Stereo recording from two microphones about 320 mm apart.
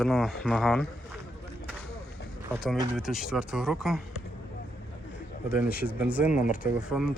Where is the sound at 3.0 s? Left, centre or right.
Centre.